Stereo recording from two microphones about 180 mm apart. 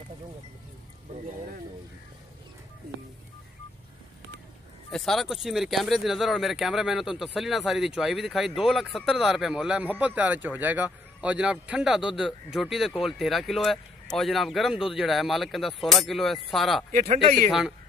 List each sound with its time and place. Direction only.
4.9 s speech: centre (ahead or behind)
16.9 s speech: 50° right (ahead or behind)
17.5 s speech: centre (ahead or behind)